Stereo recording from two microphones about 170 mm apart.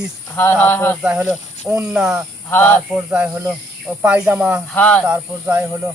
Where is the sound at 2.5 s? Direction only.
10° left (ahead or behind).